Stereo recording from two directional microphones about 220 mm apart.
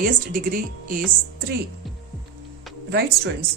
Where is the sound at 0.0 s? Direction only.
40° right (ahead or behind).